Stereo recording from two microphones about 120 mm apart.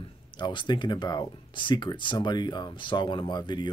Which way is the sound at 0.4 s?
40° left (ahead or behind).